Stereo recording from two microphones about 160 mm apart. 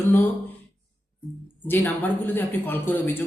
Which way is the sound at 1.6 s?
10° left (ahead or behind).